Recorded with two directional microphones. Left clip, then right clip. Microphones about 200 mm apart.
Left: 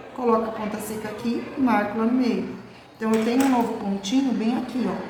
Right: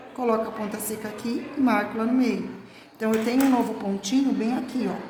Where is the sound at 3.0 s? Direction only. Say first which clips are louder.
Left 1 dB; 40° right (ahead or behind).